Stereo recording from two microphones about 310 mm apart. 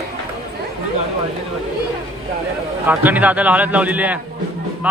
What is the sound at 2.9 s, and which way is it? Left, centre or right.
A man's voice, centre.